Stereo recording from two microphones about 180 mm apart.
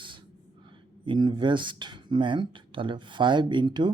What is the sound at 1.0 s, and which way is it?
Speech, 25° right (ahead or behind).